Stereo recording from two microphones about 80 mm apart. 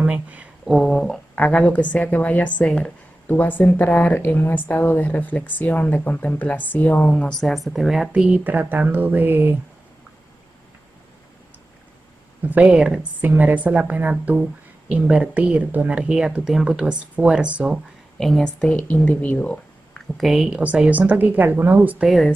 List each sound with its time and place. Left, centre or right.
0.0 s speech: centre
0.7 s speech: centre
1.3 s a woman's voice: centre
7.3 s speech: centre
8.1 s a woman's voice: centre
12.4 s a woman's voice: centre
18.1 s speech: centre
20.2 s a woman's voice: centre; by 22.0 s right
22.0 s speech: centre